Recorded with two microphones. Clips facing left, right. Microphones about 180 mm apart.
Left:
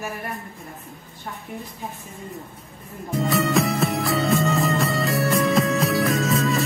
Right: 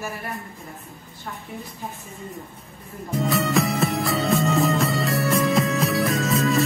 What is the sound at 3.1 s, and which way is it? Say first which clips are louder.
Music: left 1 dB; centre (ahead or behind).